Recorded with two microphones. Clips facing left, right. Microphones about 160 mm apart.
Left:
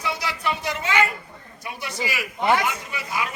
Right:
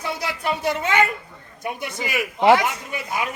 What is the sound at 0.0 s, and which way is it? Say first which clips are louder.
Speech: right 1 dB; 50° right (ahead or behind).